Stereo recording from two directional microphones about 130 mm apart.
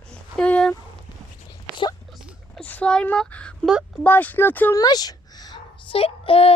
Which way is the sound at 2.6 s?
10° left (ahead or behind).